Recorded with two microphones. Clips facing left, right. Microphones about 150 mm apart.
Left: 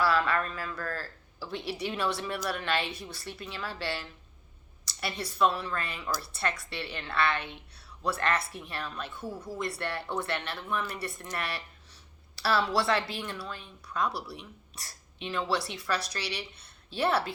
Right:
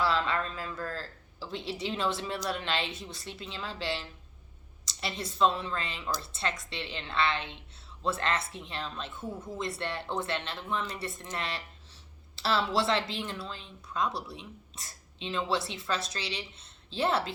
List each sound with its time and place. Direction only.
0.0 s a woman's voice: 25° right (ahead or behind)